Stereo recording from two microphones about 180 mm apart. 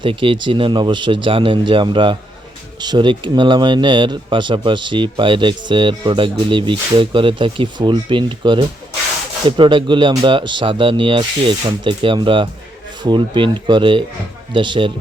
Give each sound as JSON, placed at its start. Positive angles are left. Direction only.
{"t": 0.0, "sound": "speech", "side_deg": -30}